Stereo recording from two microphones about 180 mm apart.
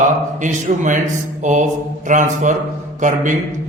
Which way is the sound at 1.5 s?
45° right (ahead or behind).